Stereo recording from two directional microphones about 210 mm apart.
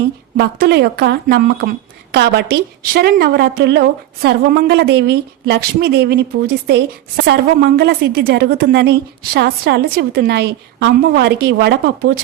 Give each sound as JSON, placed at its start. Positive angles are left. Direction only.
{"t": 0.3, "sound": "a woman's voice", "side_deg": -50}